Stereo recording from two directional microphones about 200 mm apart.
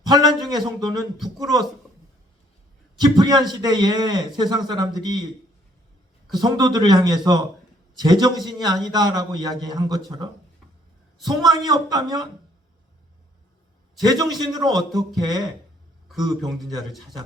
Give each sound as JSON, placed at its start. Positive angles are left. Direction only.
{"t": 0.0, "sound": "a man's voice", "side_deg": -20}
{"t": 3.0, "sound": "a man's voice", "side_deg": -20}
{"t": 6.3, "sound": "a man's voice", "side_deg": -20}
{"t": 11.3, "sound": "a man's voice", "side_deg": -20}
{"t": 14.0, "sound": "a man's voice", "side_deg": -20}